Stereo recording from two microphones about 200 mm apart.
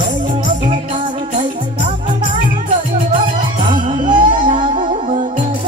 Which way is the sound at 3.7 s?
25° right (ahead or behind).